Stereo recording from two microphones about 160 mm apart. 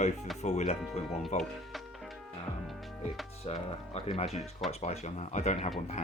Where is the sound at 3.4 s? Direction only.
40° left (ahead or behind).